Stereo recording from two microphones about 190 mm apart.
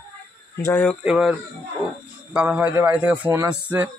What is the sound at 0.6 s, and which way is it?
Speech, 10° left (ahead or behind).